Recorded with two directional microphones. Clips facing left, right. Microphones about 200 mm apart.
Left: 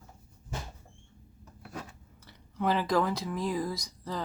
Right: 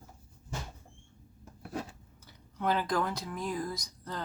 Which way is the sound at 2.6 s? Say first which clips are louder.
Left 3 dB; 5° left (ahead or behind).